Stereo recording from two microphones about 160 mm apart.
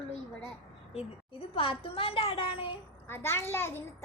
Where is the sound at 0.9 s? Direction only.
35° left (ahead or behind).